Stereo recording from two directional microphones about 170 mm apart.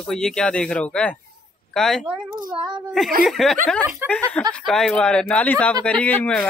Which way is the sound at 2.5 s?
30° right (ahead or behind).